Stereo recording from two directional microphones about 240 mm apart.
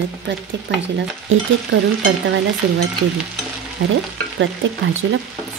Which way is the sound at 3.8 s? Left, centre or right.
Right.